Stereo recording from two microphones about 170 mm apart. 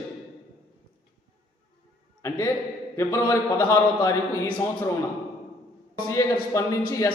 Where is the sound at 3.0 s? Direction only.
20° left (ahead or behind).